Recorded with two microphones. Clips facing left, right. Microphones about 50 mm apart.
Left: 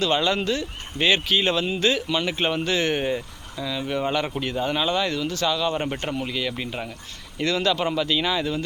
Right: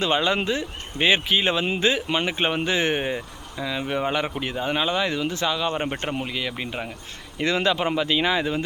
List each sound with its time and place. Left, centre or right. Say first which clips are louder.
0.0 s speech: even; right
7.3 s speech: right 1 dB; right